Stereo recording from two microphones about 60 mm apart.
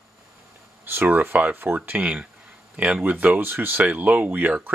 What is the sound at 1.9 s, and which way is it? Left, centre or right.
Speech, right.